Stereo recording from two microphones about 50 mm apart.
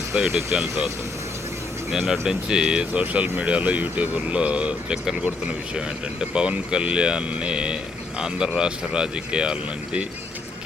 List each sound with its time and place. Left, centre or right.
0.2 s speech: centre
1.9 s speech: centre
3.0 s speech: right